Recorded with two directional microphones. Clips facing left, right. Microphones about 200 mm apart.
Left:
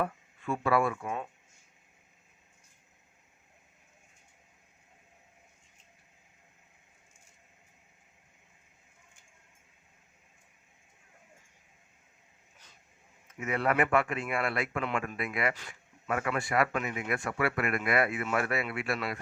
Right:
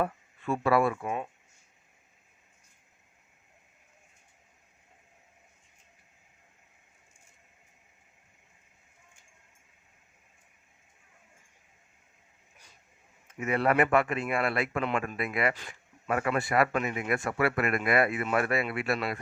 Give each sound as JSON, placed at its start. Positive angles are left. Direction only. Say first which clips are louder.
{"t": 0.0, "sound": "speech", "louder": "right 2 dB", "side_deg": -35}
{"t": 1.0, "sound": "speech", "louder": "right 3 dB", "side_deg": -15}
{"t": 13.2, "sound": "speech", "louder": "right 3 dB", "side_deg": -30}